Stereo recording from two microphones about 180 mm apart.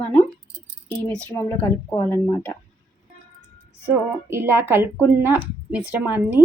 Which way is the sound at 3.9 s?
15° right (ahead or behind).